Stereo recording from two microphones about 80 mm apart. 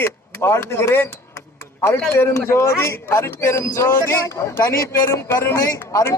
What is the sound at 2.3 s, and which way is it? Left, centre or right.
A man's voice, left.